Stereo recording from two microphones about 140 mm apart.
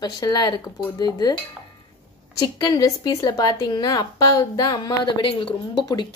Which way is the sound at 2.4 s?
25° left (ahead or behind).